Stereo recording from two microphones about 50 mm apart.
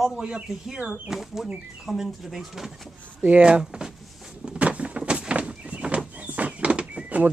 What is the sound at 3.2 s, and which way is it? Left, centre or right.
Speech, right.